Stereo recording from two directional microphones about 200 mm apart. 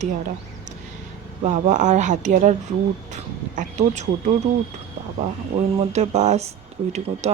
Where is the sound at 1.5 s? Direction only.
35° right (ahead or behind).